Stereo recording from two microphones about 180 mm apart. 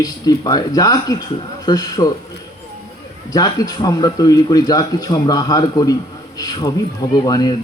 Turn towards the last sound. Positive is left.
turn(degrees=20)  # may be behind; listen again after turning